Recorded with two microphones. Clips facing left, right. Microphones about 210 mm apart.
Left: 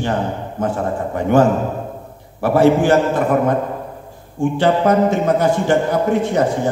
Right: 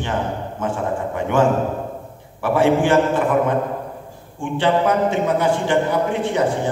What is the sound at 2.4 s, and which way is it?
A man's voice, 40° left (ahead or behind).